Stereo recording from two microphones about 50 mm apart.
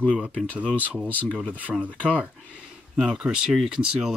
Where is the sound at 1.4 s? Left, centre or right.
Left.